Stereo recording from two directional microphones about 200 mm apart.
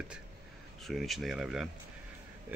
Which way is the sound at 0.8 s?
Centre (ahead or behind).